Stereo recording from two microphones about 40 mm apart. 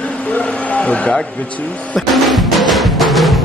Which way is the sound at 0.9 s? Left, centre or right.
Left.